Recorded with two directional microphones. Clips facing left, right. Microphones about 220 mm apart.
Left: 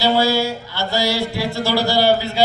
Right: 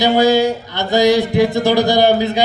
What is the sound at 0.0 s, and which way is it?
Music, 20° right (ahead or behind).